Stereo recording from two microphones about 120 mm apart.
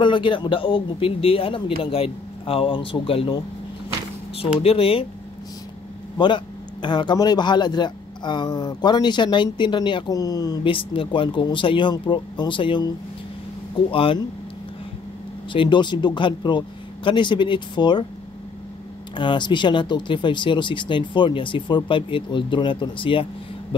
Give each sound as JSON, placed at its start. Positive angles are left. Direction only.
{"t": 0.0, "sound": "a man's voice", "side_deg": 45}
{"t": 4.4, "sound": "a man's voice", "side_deg": 50}
{"t": 6.1, "sound": "speech", "side_deg": 40}
{"t": 10.7, "sound": "a man's voice", "side_deg": 45}
{"t": 15.5, "sound": "speech", "side_deg": 45}
{"t": 19.1, "sound": "speech", "side_deg": 40}